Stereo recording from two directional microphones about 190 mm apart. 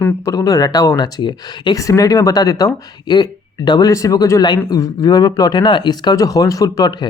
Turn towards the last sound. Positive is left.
turn(degrees=20)  # may be behind; listen again after turning